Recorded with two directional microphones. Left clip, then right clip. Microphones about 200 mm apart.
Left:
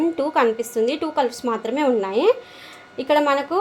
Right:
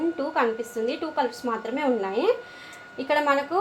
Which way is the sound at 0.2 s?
55° left (ahead or behind).